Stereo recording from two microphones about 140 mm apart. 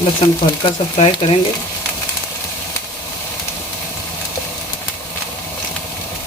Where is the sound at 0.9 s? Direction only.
45° left (ahead or behind).